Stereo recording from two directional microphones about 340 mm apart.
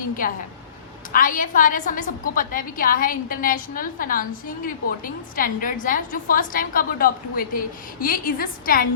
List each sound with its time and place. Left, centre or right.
0.2 s a woman's voice: left